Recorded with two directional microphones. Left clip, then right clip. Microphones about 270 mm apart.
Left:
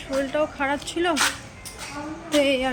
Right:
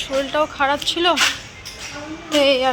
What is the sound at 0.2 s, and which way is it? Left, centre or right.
A woman's voice, centre.